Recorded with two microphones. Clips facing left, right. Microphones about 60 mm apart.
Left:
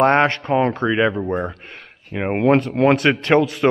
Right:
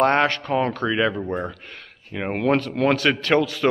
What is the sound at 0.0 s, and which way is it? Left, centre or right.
A man's voice, left.